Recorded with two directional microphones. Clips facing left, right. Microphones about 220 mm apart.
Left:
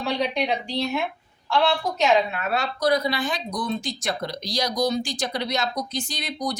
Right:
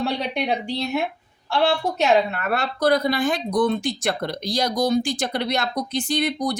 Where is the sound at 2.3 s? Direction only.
55° right (ahead or behind).